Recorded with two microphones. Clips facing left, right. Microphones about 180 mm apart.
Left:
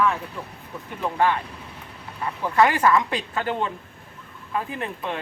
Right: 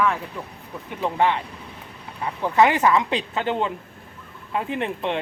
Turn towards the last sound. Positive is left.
turn(degrees=-25)  # may be behind; listen again after turning